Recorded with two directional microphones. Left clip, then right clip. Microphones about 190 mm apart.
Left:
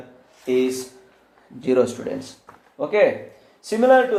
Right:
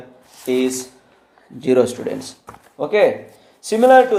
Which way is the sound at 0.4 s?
30° right (ahead or behind).